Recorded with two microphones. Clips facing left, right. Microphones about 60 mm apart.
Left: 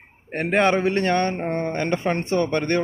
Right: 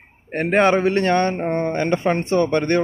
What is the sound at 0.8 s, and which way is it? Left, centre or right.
Speech, right.